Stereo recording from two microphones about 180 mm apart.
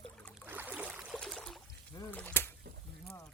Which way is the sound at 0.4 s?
10° right (ahead or behind).